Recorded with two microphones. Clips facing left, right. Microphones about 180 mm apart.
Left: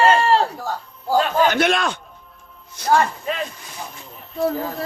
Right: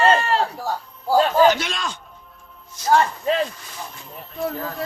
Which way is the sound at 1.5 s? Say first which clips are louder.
Left 9 dB; 60° left (ahead or behind).